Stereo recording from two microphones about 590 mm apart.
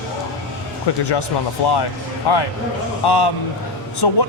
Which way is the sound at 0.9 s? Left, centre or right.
Left.